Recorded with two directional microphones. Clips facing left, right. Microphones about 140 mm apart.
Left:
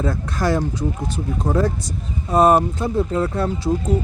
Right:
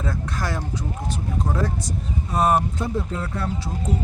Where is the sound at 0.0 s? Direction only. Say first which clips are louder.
Left 6 dB; 35° left (ahead or behind).